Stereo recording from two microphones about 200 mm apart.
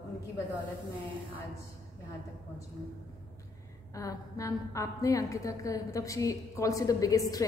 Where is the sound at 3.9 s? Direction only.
15° left (ahead or behind).